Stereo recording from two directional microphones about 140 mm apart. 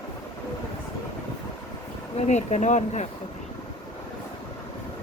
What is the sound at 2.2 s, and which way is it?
Speech, 55° left (ahead or behind).